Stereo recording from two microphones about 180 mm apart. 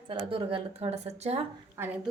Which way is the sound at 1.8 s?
15° right (ahead or behind).